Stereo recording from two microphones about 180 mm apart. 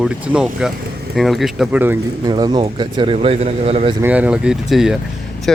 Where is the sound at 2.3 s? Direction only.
25° right (ahead or behind).